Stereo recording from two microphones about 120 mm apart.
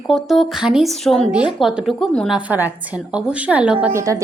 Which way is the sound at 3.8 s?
25° right (ahead or behind).